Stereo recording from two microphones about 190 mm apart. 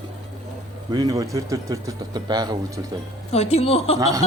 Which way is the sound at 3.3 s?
35° left (ahead or behind).